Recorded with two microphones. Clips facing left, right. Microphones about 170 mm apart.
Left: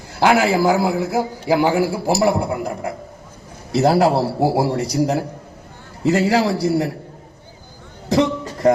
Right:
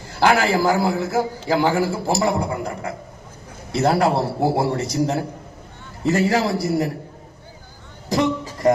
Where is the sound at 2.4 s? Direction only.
25° left (ahead or behind).